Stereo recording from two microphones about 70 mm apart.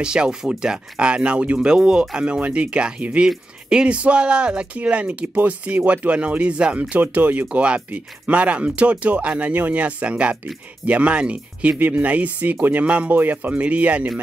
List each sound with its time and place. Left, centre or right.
0.0 s speech: centre